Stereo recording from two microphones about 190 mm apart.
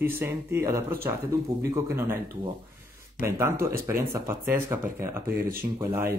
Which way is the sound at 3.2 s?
15° right (ahead or behind).